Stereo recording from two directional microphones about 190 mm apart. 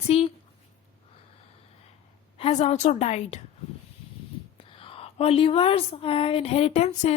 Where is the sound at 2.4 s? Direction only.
35° left (ahead or behind).